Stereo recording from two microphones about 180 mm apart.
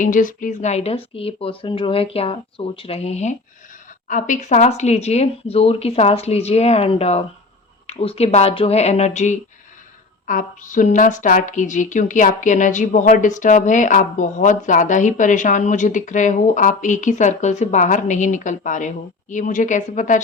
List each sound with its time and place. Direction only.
0.0 s speech: 45° left (ahead or behind)